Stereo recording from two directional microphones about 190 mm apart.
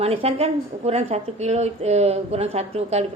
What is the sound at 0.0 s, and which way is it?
A woman's voice, 30° right (ahead or behind).